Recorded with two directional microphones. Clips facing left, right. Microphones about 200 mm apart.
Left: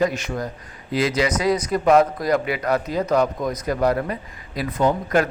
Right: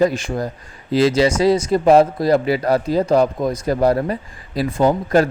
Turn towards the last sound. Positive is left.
turn(degrees=-35)  # may be behind; listen again after turning